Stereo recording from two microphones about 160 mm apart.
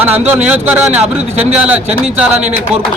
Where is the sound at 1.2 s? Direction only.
40° right (ahead or behind).